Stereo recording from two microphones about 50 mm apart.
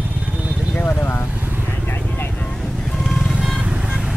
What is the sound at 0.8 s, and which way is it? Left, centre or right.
Speech, left.